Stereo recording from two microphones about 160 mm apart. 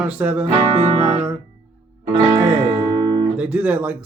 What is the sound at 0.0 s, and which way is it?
Speech, 10° right (ahead or behind).